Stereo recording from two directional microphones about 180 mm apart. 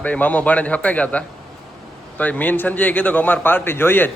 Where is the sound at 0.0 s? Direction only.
10° left (ahead or behind).